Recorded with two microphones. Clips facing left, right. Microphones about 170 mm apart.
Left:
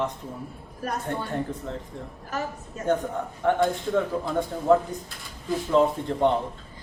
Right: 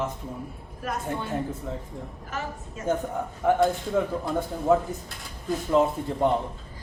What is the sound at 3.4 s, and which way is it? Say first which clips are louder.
A woman's voice: right 1 dB; 5° right (ahead or behind).